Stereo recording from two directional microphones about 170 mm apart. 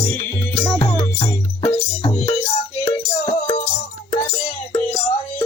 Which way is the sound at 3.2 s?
40° left (ahead or behind).